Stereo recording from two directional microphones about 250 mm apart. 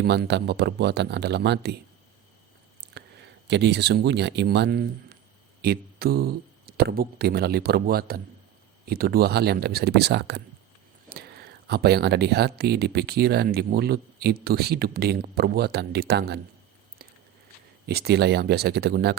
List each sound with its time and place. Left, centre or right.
0.0 s speech: right
2.8 s speech: right
17.8 s speech: right